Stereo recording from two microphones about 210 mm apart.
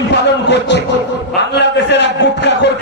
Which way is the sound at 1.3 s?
55° left (ahead or behind).